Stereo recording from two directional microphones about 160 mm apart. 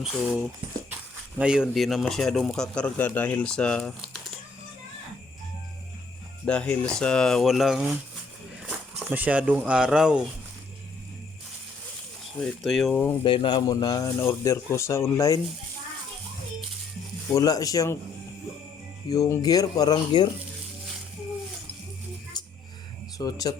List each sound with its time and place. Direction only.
1.4 s speech: 5° right (ahead or behind)
6.4 s speech: 10° left (ahead or behind)
9.0 s speech: 10° right (ahead or behind)
12.4 s speech: centre (ahead or behind)
13.2 s speech: 30° left (ahead or behind)
17.3 s speech: 20° left (ahead or behind)
19.1 s speech: 20° left (ahead or behind)
23.1 s speech: 25° left (ahead or behind)